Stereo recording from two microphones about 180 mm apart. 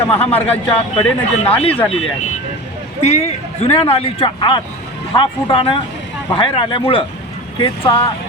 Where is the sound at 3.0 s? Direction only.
35° left (ahead or behind).